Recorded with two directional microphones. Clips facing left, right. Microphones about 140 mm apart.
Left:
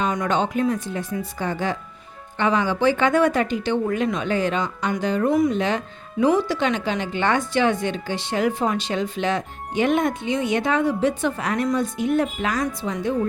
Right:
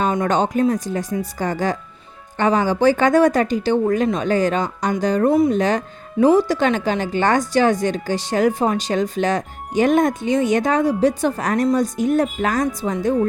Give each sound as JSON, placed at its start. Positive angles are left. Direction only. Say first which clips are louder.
{"t": 0.2, "sound": "speech", "louder": "right 4 dB", "side_deg": -40}